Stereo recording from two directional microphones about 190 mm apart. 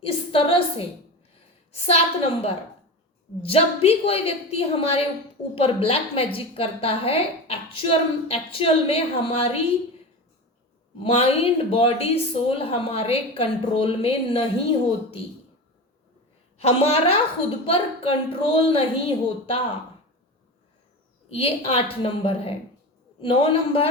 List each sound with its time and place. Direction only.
0.0 s a woman's voice: 30° left (ahead or behind)
11.0 s a woman's voice: 30° left (ahead or behind)
16.6 s a woman's voice: 30° left (ahead or behind)
21.2 s a woman's voice: 30° left (ahead or behind)